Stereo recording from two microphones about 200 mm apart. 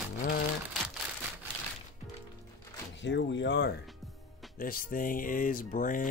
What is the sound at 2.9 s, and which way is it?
Speech, 65° left (ahead or behind).